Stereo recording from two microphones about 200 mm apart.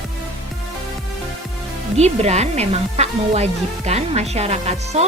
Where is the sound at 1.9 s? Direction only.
35° right (ahead or behind).